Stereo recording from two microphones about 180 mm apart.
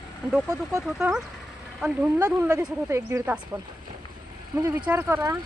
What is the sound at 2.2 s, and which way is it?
Speech, 20° right (ahead or behind).